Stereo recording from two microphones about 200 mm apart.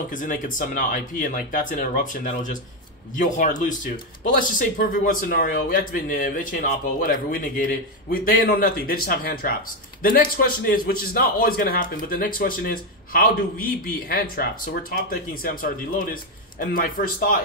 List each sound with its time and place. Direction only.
0.1 s a man's voice: 40° left (ahead or behind)